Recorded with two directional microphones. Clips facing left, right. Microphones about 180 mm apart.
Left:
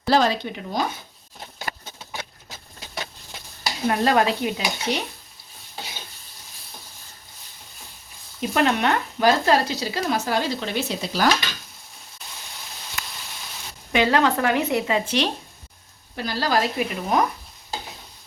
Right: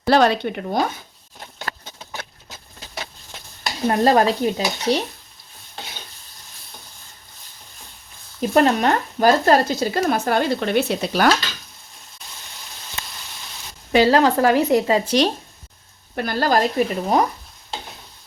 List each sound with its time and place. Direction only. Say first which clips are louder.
0.0 s speech: right 4 dB; 60° right (ahead or behind)
3.8 s speech: right 4 dB; 35° right (ahead or behind)
8.4 s speech: right 4 dB; 40° right (ahead or behind); by 11.3 s 60° right (ahead or behind)
13.9 s speech: right 4 dB; 35° right (ahead or behind)
16.1 s speech: right 4 dB; 55° right (ahead or behind); by 17.2 s 35° right (ahead or behind)